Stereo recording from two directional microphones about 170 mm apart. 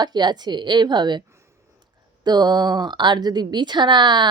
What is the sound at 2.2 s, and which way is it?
Speech, 25° right (ahead or behind).